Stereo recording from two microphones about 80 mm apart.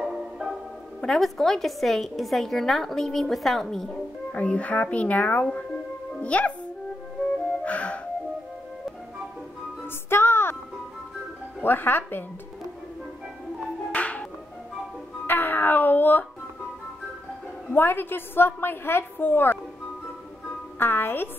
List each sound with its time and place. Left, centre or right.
0.0 s marimba: centre
1.0 s a woman's voice: centre
4.3 s speech: centre
7.6 s music: centre
10.0 s music: left
11.6 s a woman's voice: left
13.9 s music: centre
15.2 s speech: left
17.7 s a woman's voice: left
20.8 s a woman's voice: left